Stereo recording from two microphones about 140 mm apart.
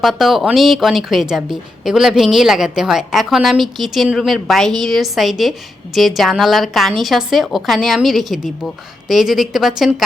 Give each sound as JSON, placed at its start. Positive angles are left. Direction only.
{"t": 0.0, "sound": "a woman's voice", "side_deg": 0}